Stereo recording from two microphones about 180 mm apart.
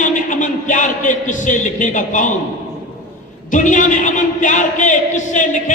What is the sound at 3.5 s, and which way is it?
A man's voice, 45° left (ahead or behind).